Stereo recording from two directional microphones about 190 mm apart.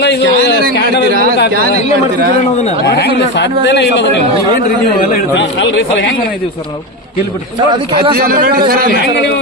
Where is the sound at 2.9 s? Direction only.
60° left (ahead or behind).